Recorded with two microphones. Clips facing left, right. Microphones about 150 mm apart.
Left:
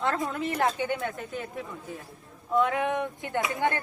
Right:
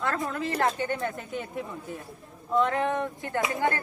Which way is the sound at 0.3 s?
20° left (ahead or behind).